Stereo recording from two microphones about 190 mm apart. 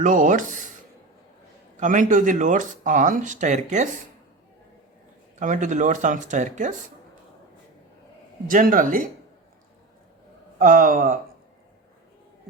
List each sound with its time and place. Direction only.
0.0 s speech: 45° right (ahead or behind)
1.7 s speech: 45° right (ahead or behind)
5.4 s speech: 40° right (ahead or behind)
8.4 s speech: 45° right (ahead or behind)
10.6 s speech: 45° right (ahead or behind)